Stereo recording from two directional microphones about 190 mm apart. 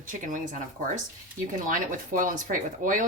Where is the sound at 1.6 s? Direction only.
45° right (ahead or behind).